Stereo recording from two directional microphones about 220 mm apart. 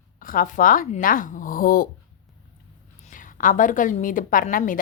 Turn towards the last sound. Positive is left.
turn(degrees=35)  # may be behind; listen again after turning